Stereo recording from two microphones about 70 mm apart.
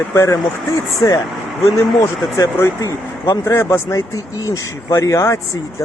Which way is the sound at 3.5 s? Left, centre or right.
Left.